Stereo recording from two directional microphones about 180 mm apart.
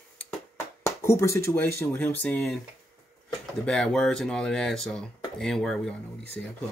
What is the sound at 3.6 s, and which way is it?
Speech, 5° left (ahead or behind).